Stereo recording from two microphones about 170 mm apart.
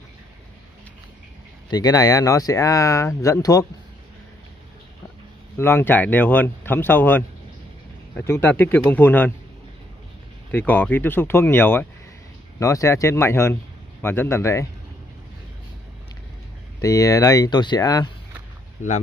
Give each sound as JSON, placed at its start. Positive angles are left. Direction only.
{"t": 1.7, "sound": "speech", "side_deg": 20}
{"t": 5.6, "sound": "speech", "side_deg": 15}
{"t": 10.5, "sound": "speech", "side_deg": 10}
{"t": 16.8, "sound": "speech", "side_deg": 20}